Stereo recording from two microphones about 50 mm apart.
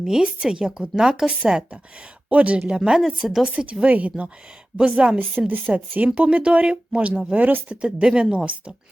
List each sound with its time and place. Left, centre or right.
0.0 s a woman's voice: centre
3.2 s speech: centre
3.4 s speech: right
5.0 s a woman's voice: centre
5.5 s speech: right
6.1 s speech: right
7.8 s speech: right